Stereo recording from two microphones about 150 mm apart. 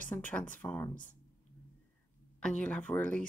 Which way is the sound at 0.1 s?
10° left (ahead or behind).